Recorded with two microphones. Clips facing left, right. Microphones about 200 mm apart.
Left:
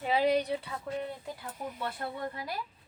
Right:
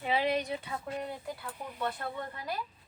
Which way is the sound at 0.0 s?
40° left (ahead or behind).